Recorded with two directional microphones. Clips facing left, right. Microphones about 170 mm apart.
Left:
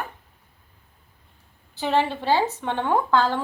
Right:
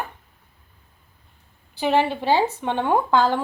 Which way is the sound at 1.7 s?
15° right (ahead or behind).